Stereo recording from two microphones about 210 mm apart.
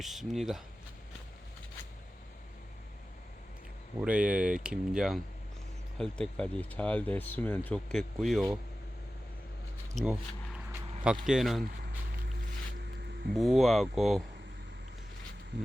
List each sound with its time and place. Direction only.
0.0 s speech: centre (ahead or behind)
4.0 s speech: 5° right (ahead or behind)
9.9 s a sound: 5° right (ahead or behind)
11.0 s speech: 5° right (ahead or behind)
13.3 s speech: centre (ahead or behind)
15.5 s speech: 55° right (ahead or behind)